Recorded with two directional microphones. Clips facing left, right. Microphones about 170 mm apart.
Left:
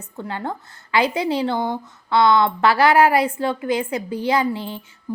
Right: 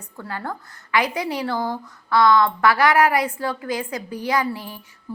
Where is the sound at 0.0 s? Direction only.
25° left (ahead or behind).